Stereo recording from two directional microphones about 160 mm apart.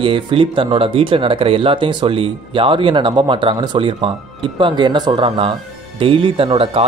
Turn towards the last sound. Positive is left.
turn(degrees=-35)  # may be behind; listen again after turning